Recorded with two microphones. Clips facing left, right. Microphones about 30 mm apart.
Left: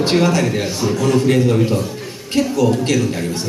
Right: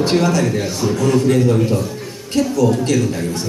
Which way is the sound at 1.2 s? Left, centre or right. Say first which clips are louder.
Even; left.